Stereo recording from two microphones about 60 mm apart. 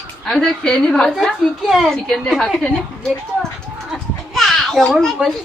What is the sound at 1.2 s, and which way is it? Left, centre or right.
A woman's voice, centre.